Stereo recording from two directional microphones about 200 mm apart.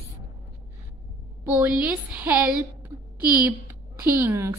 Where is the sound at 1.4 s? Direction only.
10° right (ahead or behind).